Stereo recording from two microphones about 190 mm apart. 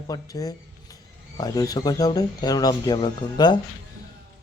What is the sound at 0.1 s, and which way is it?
Speech, 20° left (ahead or behind).